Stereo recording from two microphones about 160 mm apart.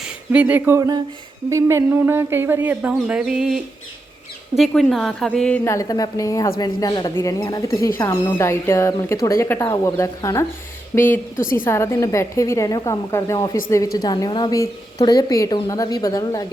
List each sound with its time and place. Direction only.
0.3 s speech: 10° right (ahead or behind)
0.8 s a woman's voice: 20° right (ahead or behind); by 5.5 s 5° left (ahead or behind)
5.6 s a woman's voice: 20° left (ahead or behind)
11.3 s a woman's voice: 60° left (ahead or behind)
11.6 s a woman's voice: 15° left (ahead or behind)